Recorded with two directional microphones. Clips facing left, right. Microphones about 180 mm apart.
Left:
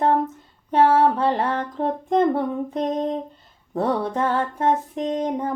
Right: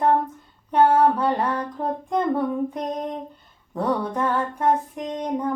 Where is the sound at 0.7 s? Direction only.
25° left (ahead or behind).